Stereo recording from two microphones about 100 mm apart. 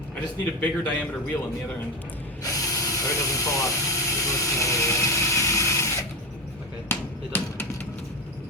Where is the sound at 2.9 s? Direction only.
35° left (ahead or behind).